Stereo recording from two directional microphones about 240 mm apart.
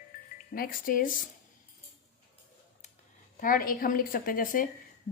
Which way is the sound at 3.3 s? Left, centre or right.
Left.